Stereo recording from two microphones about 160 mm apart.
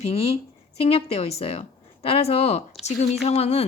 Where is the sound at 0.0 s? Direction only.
40° left (ahead or behind).